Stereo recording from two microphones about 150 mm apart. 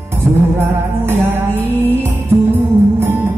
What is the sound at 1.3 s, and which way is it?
Music, 15° right (ahead or behind).